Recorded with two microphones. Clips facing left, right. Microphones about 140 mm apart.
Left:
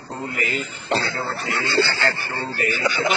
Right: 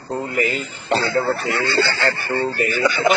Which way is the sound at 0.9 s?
50° right (ahead or behind).